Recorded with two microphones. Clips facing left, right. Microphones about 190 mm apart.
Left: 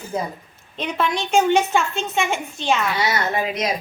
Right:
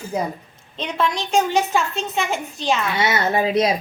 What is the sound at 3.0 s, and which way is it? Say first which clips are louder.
Speech: right 2 dB; 25° right (ahead or behind).